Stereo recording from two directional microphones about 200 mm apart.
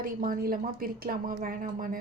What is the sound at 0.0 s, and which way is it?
A woman's voice, 45° right (ahead or behind).